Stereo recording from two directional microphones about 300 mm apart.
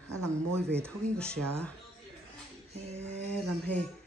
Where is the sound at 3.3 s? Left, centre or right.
Centre.